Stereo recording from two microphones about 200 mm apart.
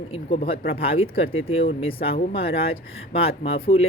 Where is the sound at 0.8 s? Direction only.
30° left (ahead or behind).